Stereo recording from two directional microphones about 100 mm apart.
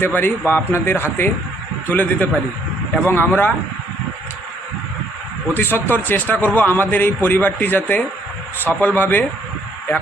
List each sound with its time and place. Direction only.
0.0 s a man's voice: 20° left (ahead or behind)
5.5 s a man's voice: 20° left (ahead or behind)